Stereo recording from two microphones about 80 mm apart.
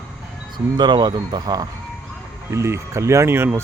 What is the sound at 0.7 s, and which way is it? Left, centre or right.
Speech, right.